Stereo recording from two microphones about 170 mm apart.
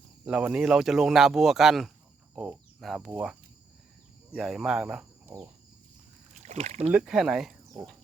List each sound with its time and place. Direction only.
0.3 s speech: 5° right (ahead or behind)
4.4 s speech: centre (ahead or behind)
6.3 s rowboat: 45° right (ahead or behind)
6.9 s speech: 5° right (ahead or behind)